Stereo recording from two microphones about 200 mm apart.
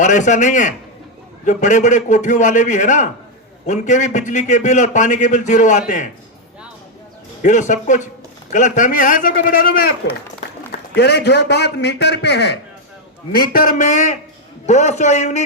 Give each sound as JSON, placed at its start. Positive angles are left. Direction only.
{"t": 0.0, "sound": "a man's voice", "side_deg": 40}
{"t": 7.4, "sound": "a man's voice", "side_deg": 40}
{"t": 10.9, "sound": "a man's voice", "side_deg": 55}
{"t": 13.3, "sound": "a man's voice", "side_deg": 45}